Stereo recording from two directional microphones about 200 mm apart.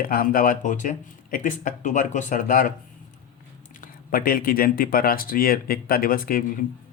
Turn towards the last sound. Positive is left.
turn(degrees=45)  # may be behind; listen again after turning